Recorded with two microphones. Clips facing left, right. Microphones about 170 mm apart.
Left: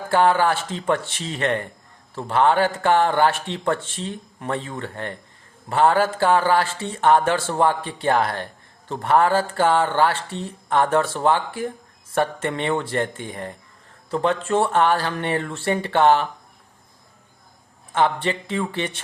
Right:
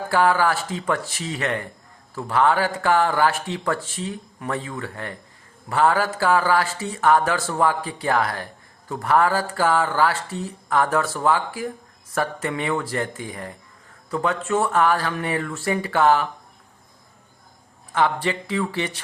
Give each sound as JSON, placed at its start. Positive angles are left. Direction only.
{"t": 0.1, "sound": "a man's voice", "side_deg": 25}
{"t": 17.9, "sound": "a man's voice", "side_deg": 25}